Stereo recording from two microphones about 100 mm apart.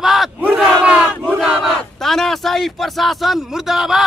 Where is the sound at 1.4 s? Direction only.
Centre (ahead or behind).